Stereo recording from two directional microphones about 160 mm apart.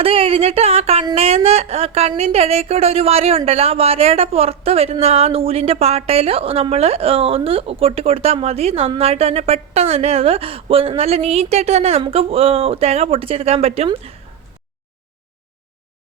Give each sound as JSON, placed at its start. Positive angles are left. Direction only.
{"t": 0.0, "sound": "speech", "side_deg": -35}